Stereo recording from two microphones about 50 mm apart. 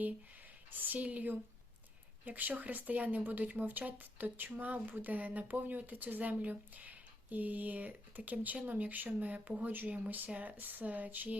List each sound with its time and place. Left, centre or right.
0.7 s speech: right